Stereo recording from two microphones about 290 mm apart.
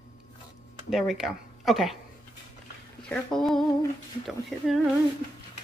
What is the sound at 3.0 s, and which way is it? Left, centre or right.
Speech, centre.